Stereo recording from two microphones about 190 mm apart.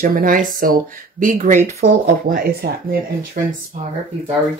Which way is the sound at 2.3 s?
50° right (ahead or behind).